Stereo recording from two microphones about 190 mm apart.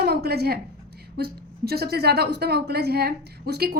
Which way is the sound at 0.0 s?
55° right (ahead or behind).